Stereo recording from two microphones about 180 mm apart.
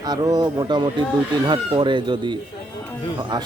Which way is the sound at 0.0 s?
20° right (ahead or behind).